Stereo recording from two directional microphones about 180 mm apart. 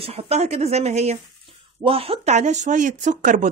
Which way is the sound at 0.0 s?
35° right (ahead or behind).